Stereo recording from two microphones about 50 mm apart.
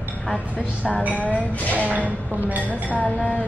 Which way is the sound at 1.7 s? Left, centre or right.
Right.